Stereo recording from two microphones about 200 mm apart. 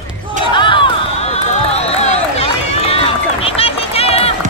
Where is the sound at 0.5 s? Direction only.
25° left (ahead or behind).